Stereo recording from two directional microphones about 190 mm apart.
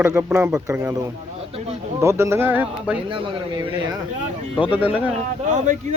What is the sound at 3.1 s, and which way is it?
Speech, 20° right (ahead or behind).